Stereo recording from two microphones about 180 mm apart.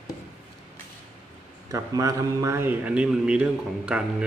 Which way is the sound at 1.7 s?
20° right (ahead or behind).